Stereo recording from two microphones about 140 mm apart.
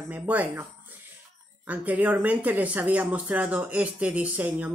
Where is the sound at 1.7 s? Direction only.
10° right (ahead or behind).